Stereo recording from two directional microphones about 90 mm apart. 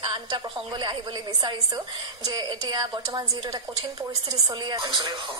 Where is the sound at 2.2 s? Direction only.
50° right (ahead or behind).